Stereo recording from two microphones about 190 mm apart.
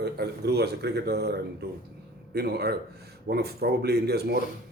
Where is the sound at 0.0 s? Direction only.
60° right (ahead or behind).